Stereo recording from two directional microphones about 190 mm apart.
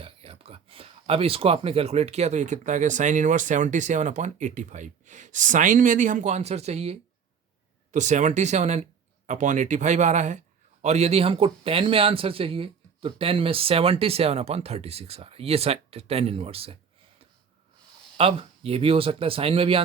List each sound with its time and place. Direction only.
0.0 s speech: 30° right (ahead or behind)
18.2 s speech: 30° right (ahead or behind)